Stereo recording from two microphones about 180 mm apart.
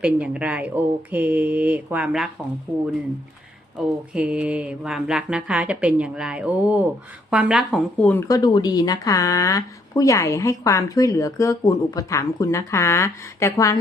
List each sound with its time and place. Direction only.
0.0 s speech: 5° right (ahead or behind)
8.3 s speech: 25° left (ahead or behind)